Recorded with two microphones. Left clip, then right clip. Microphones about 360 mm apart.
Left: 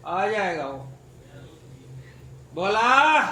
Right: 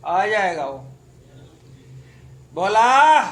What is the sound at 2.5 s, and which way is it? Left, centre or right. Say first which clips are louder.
Speech: right 4 dB; right.